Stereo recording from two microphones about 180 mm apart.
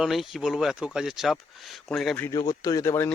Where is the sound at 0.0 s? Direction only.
Centre (ahead or behind).